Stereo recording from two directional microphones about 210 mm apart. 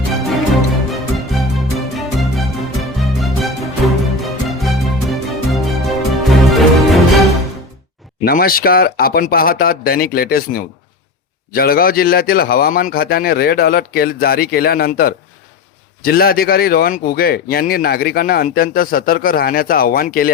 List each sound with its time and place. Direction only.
0.9 s music: centre (ahead or behind)
8.2 s speech: 45° left (ahead or behind)